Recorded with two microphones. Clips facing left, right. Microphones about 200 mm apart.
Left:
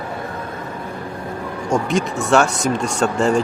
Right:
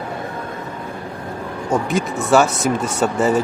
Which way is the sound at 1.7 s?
Centre (ahead or behind).